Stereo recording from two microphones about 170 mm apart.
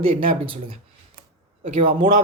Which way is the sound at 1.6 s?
50° right (ahead or behind).